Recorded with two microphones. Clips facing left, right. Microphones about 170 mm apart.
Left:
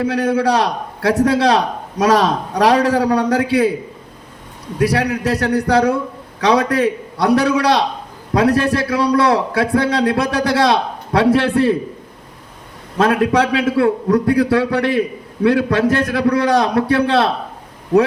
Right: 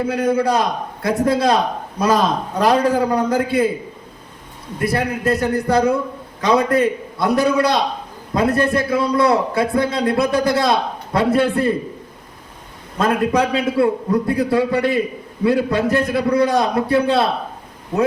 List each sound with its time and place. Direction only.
0.0 s a man's voice: 70° left (ahead or behind)
4.8 s a man's voice: 85° left
13.0 s a man's voice: 90° left